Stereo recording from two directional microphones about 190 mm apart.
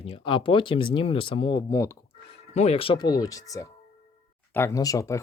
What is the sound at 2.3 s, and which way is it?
Speech, 35° left (ahead or behind).